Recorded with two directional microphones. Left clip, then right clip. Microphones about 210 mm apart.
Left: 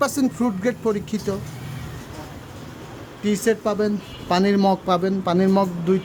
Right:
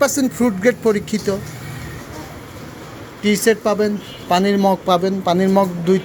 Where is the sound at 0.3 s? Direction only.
Centre (ahead or behind).